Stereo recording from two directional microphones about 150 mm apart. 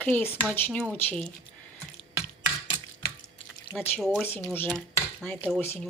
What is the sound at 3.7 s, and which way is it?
Speech, 15° left (ahead or behind).